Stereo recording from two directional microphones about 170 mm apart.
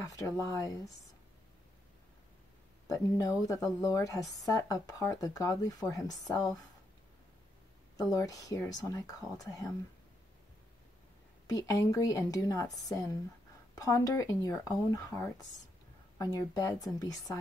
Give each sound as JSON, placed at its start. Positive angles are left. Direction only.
{"t": 0.0, "sound": "speech", "side_deg": 20}
{"t": 2.9, "sound": "speech", "side_deg": 20}
{"t": 8.0, "sound": "speech", "side_deg": 20}
{"t": 11.4, "sound": "speech", "side_deg": 20}